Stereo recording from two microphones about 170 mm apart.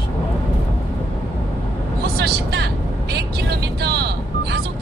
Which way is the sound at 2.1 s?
70° right (ahead or behind).